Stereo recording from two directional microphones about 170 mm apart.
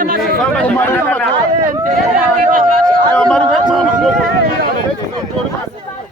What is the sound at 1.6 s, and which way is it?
Run, 50° right (ahead or behind).